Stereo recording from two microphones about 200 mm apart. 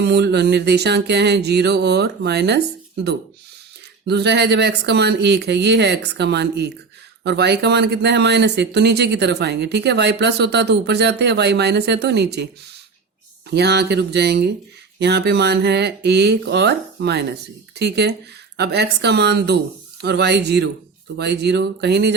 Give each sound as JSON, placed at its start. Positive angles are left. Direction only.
{"t": 0.0, "sound": "speech", "side_deg": -55}
{"t": 13.5, "sound": "speech", "side_deg": -55}